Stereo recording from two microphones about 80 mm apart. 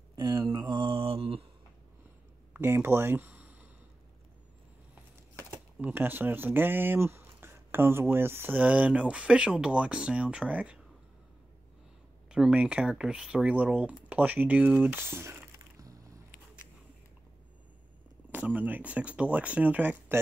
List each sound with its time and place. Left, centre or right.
0.2 s mantra: right
0.7 s mantra: right
2.6 s speech: right
3.3 s a sound: centre
5.3 s a sound: right
5.8 s speech: right
12.3 s speech: centre; by 15.4 s right
18.3 s speech: right